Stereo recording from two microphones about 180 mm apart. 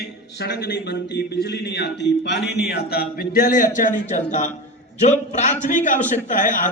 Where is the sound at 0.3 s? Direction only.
70° left (ahead or behind).